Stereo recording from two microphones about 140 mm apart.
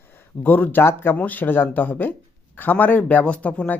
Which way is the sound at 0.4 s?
15° left (ahead or behind).